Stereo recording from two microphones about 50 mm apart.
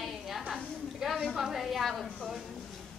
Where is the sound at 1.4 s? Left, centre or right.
Centre.